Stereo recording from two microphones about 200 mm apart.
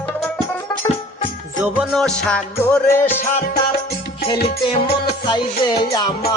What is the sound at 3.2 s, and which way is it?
Music, 45° left (ahead or behind).